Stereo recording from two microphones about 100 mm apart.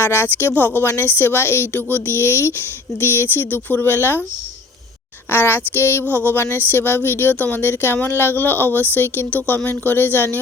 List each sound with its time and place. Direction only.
0.0 s speech: 25° left (ahead or behind)
5.3 s speech: 20° left (ahead or behind)